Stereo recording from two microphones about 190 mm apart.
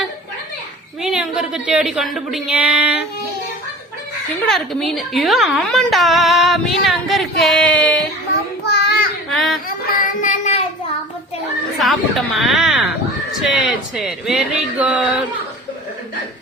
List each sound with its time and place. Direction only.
1.0 s speech: 5° right (ahead or behind)
4.4 s a woman's voice: centre (ahead or behind)
8.6 s child singing: 60° left (ahead or behind)
9.3 s a sound: centre (ahead or behind)
10.2 s child singing: 40° left (ahead or behind)
11.8 s a woman's voice: centre (ahead or behind)